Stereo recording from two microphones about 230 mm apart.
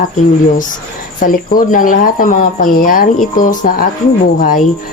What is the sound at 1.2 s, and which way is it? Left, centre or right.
Speech, left.